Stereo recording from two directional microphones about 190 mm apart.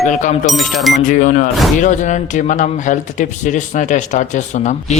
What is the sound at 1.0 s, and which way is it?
A man's voice, 45° left (ahead or behind).